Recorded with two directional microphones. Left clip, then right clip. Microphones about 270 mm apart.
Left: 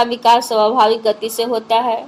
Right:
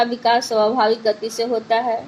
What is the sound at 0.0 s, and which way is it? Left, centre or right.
A woman's voice, left.